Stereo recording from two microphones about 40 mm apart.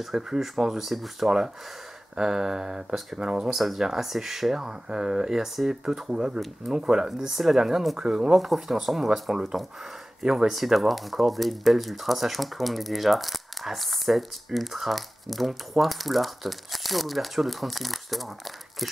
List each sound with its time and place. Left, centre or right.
0.0 s speech: centre
2.1 s speech: centre
7.1 s speech: centre